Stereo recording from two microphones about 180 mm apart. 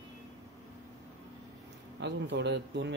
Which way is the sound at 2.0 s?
70° right (ahead or behind).